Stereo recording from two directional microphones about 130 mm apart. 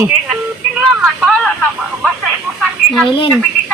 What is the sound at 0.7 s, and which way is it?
Speech, 5° right (ahead or behind).